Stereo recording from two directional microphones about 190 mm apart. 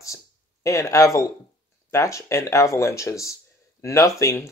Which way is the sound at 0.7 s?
15° left (ahead or behind).